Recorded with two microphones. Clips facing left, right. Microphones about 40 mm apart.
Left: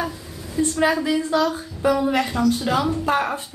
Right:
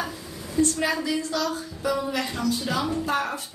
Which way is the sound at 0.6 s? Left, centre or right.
Left.